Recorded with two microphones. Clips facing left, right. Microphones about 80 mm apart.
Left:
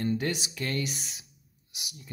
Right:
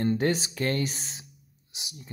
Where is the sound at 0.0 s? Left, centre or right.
Right.